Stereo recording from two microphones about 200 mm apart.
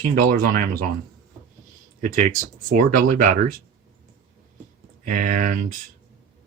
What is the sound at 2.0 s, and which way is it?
Speech, 40° right (ahead or behind).